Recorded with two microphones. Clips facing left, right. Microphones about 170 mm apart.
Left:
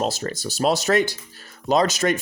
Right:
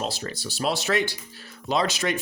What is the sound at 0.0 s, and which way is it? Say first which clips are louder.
Speech: left 6 dB; 45° left (ahead or behind).